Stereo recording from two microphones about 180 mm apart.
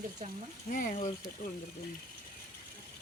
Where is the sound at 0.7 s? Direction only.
45° left (ahead or behind).